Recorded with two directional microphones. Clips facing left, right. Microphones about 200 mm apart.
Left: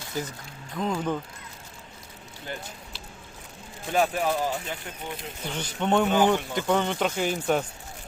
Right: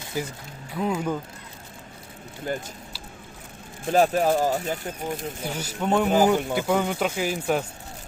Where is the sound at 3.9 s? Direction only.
35° right (ahead or behind).